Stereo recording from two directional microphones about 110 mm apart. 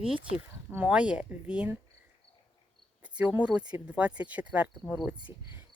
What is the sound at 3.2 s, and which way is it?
Speech, 10° right (ahead or behind).